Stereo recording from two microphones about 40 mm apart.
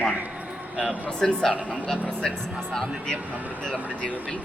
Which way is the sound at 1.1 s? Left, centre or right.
Centre.